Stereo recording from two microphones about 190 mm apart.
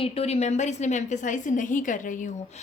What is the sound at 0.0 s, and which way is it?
Speech, 35° left (ahead or behind).